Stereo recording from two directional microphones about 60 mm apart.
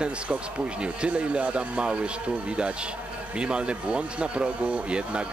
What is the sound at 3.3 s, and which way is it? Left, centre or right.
Speech, centre.